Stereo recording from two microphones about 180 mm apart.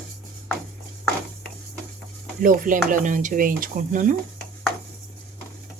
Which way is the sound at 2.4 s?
50° right (ahead or behind).